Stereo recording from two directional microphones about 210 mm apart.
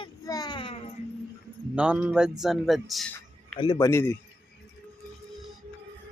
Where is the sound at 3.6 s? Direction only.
20° left (ahead or behind).